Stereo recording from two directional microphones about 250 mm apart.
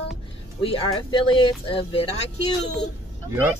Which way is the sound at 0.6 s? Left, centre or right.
Left.